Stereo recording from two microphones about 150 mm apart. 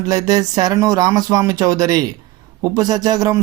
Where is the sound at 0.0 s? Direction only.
25° right (ahead or behind).